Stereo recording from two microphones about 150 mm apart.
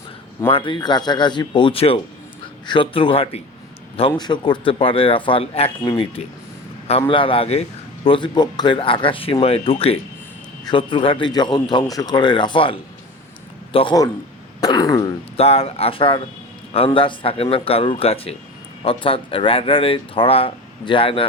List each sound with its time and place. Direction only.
0.4 s speech: 35° left (ahead or behind)
13.7 s speech: 35° left (ahead or behind)
14.6 s throat clearing: 25° left (ahead or behind)
15.4 s speech: 40° left (ahead or behind)